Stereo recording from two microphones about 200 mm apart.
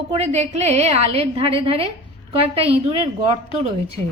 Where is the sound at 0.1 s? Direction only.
35° right (ahead or behind).